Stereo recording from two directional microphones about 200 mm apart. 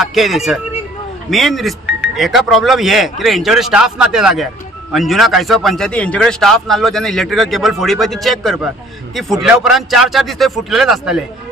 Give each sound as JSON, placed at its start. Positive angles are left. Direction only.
{"t": 0.0, "sound": "a man's voice", "side_deg": 0}